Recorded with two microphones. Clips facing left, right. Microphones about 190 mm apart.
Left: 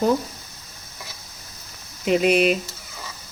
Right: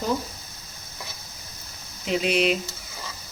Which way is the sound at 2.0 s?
55° left (ahead or behind).